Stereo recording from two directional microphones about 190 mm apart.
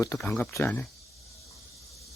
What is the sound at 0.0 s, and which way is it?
Speech, 10° left (ahead or behind).